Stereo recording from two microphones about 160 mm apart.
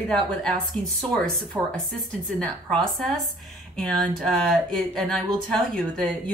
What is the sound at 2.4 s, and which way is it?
Speech, 5° left (ahead or behind).